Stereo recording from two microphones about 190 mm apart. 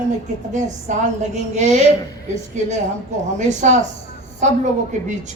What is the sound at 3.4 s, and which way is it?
Speech, 40° right (ahead or behind).